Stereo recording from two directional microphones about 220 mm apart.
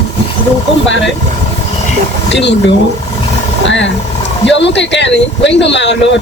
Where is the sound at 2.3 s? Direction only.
55° left (ahead or behind).